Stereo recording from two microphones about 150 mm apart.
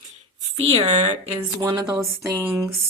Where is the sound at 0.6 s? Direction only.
45° right (ahead or behind).